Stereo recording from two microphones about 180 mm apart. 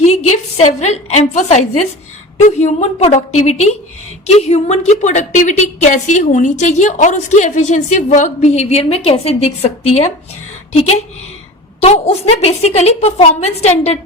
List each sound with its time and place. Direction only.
0.0 s a woman's voice: 40° left (ahead or behind)
11.8 s a woman's voice: 35° left (ahead or behind)